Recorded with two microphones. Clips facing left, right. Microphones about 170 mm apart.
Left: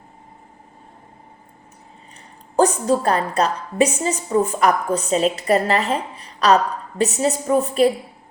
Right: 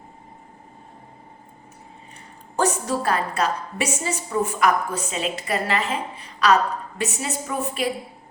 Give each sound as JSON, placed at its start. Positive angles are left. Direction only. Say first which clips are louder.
{"t": 2.6, "sound": "a woman's voice", "louder": "left 6 dB", "side_deg": 35}